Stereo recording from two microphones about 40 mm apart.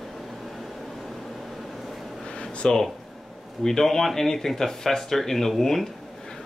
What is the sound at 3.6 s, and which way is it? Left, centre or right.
Speech, centre.